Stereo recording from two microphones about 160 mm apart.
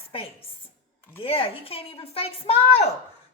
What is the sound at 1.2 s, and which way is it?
A woman's voice, 35° left (ahead or behind).